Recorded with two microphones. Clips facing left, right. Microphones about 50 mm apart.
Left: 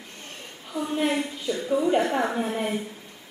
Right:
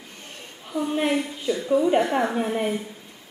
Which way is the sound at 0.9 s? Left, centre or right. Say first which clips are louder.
Even; centre.